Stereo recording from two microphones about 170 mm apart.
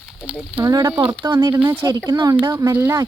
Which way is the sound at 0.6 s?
20° right (ahead or behind).